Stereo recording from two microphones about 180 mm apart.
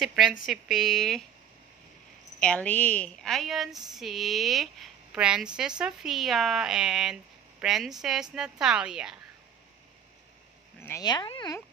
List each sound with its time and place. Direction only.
0.0 s a woman's voice: 5° right (ahead or behind)
2.4 s a woman's voice: 5° left (ahead or behind)
10.8 s a sound: 15° left (ahead or behind)
11.1 s speech: 25° left (ahead or behind)